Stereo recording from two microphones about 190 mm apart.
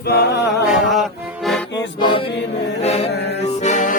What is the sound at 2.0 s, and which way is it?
Chant, 25° left (ahead or behind).